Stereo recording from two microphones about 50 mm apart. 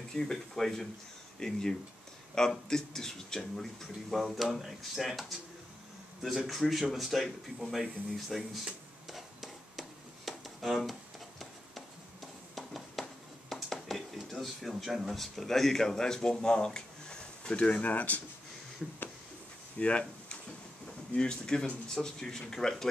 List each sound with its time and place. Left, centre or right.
0.1 s speech: centre
9.1 s music: centre
10.9 s a sound: centre
14.1 s speech: centre; by 18.2 s left
18.8 s speech: centre
19.8 s speech: left